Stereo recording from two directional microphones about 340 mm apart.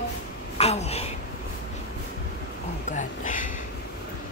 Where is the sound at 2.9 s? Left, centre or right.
Left.